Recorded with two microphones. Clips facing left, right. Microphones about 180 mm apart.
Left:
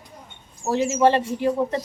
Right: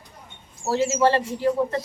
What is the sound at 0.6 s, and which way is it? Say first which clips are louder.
Speech: left 1 dB; 15° left (ahead or behind).